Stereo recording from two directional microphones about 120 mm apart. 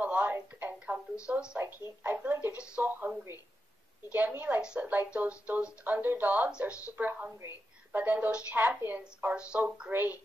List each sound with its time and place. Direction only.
0.0 s telephone: 15° right (ahead or behind)
1.2 s a woman's voice: 10° right (ahead or behind)